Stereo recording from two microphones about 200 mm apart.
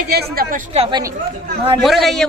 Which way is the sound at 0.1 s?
50° right (ahead or behind).